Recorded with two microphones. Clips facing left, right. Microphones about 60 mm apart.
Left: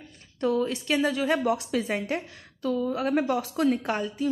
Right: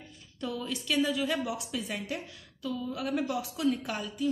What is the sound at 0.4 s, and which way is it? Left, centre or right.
A woman's voice, left.